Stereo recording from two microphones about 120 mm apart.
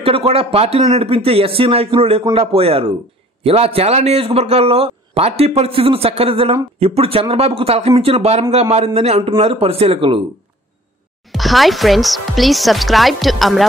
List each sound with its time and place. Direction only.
0.0 s a man's voice: 50° right (ahead or behind)
11.2 s speech: centre (ahead or behind)